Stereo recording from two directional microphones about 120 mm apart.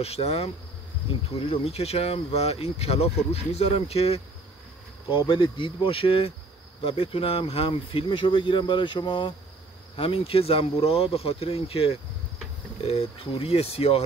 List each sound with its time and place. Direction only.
0.0 s speech: 60° left (ahead or behind)
5.3 s speech: 45° left (ahead or behind)